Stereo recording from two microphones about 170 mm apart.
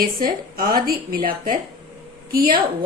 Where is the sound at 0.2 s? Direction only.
55° right (ahead or behind).